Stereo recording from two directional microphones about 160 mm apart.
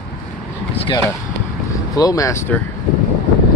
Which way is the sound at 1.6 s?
20° left (ahead or behind).